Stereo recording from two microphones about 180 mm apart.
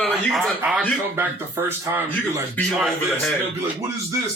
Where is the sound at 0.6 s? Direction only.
10° right (ahead or behind).